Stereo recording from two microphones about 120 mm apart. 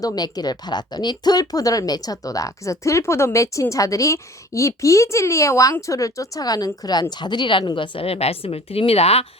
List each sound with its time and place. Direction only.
0.0 s speech: 35° left (ahead or behind); by 9.2 s 55° left (ahead or behind)